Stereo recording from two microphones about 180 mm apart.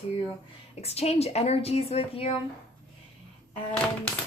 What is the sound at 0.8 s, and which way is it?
Speech, 35° left (ahead or behind).